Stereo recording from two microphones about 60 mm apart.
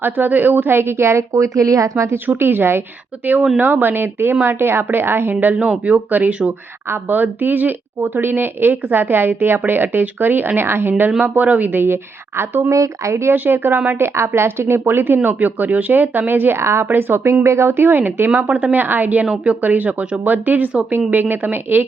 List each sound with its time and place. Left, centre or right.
0.0 s a woman's voice: right
2.4 s a woman's voice: right
12.7 s speech: right
13.3 s speech: right
17.4 s speech: right
18.4 s a woman's voice: right
19.2 s a woman's voice: centre
19.6 s a woman's voice: right